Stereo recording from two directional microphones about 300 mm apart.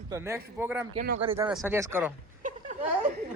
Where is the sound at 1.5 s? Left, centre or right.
Centre.